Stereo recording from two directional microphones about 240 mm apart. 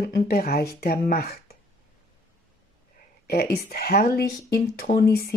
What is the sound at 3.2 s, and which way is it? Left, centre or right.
Speech, left.